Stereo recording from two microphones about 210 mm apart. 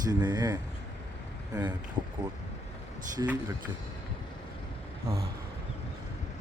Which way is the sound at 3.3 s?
10° right (ahead or behind).